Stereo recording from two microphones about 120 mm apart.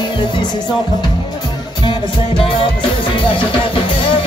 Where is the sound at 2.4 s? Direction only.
50° left (ahead or behind).